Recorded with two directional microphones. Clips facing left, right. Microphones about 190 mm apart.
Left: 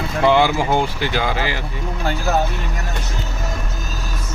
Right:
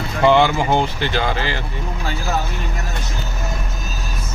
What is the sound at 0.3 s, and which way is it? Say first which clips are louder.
Speech: right 1 dB; 5° left (ahead or behind).